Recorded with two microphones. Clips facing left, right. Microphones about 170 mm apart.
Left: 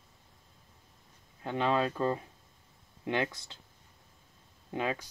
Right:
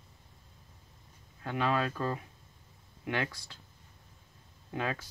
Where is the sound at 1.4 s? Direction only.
20° left (ahead or behind).